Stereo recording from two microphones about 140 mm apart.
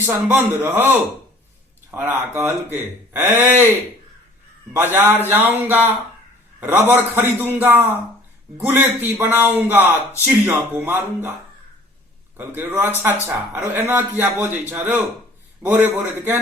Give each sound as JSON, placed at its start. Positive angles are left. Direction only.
{"t": 0.0, "sound": "a man's voice", "side_deg": -15}
{"t": 1.9, "sound": "a man's voice", "side_deg": -15}
{"t": 4.8, "sound": "a man's voice", "side_deg": -15}
{"t": 12.4, "sound": "a man's voice", "side_deg": -15}